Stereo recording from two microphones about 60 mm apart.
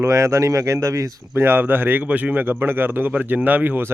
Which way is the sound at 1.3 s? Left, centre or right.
Right.